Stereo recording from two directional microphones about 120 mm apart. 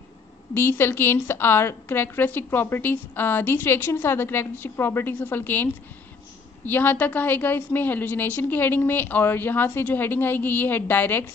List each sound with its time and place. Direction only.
0.6 s a woman's voice: 20° left (ahead or behind)